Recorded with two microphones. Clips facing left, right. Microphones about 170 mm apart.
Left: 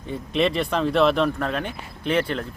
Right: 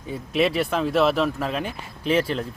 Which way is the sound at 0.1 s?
5° right (ahead or behind).